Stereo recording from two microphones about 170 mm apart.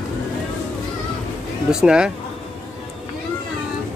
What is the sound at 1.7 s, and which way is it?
Speech, 5° right (ahead or behind).